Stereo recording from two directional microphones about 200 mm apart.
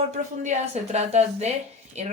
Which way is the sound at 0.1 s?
35° right (ahead or behind).